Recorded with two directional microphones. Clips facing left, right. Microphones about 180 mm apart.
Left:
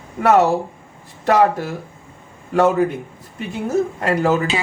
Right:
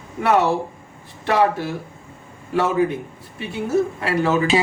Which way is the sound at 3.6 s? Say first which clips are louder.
Left 1 dB; 45° left (ahead or behind).